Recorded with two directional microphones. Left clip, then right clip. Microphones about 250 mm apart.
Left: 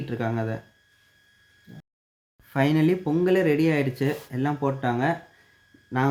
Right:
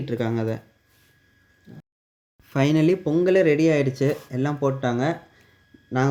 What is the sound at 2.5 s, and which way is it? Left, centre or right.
Speech, centre.